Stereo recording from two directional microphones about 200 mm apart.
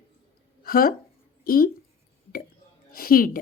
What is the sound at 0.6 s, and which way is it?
A woman's voice, 50° left (ahead or behind).